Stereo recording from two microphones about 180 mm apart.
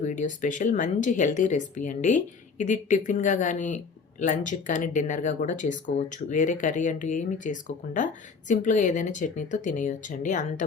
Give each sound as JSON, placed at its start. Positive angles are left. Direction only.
{"t": 0.0, "sound": "speech", "side_deg": 45}